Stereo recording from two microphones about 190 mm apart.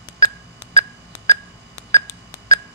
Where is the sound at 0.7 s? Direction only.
20° left (ahead or behind).